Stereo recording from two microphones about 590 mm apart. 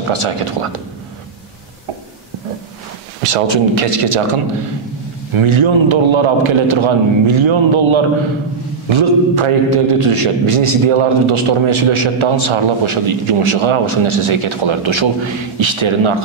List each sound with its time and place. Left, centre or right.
0.1 s a man's voice: right
3.2 s a man's voice: right